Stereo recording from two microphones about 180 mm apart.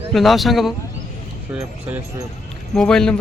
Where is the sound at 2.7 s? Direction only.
5° left (ahead or behind).